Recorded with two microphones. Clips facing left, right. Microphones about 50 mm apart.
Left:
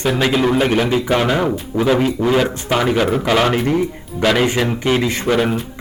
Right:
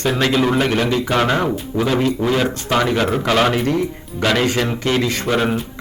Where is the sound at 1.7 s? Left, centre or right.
Centre.